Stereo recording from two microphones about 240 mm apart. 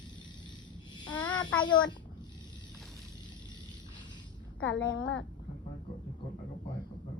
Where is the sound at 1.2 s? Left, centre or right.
Centre.